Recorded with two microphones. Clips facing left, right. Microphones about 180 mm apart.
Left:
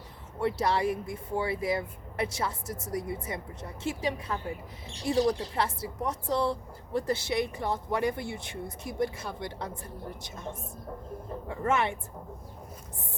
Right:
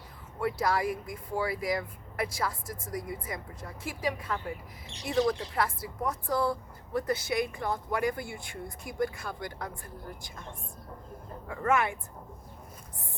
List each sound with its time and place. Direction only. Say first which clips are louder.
0.3 s speech: left 1 dB; 25° left (ahead or behind)
11.4 s speech: even; 25° left (ahead or behind)